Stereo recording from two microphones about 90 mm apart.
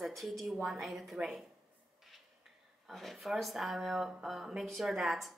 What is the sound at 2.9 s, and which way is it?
Speech, centre (ahead or behind).